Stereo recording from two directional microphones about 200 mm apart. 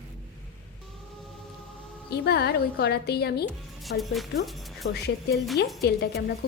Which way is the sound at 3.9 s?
Centre (ahead or behind).